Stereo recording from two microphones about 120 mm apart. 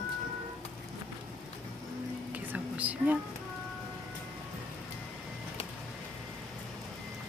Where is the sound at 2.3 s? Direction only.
10° right (ahead or behind).